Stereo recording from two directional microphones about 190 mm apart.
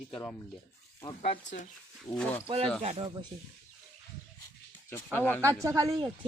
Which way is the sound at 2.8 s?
35° right (ahead or behind).